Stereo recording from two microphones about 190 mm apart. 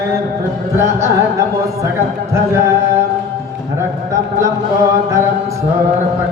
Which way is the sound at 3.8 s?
15° right (ahead or behind).